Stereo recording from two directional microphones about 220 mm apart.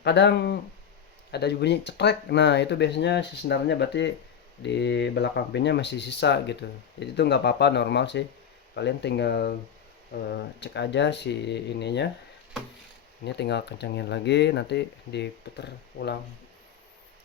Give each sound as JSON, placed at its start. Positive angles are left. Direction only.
{"t": 0.0, "sound": "speech", "side_deg": 50}
{"t": 13.2, "sound": "speech", "side_deg": 50}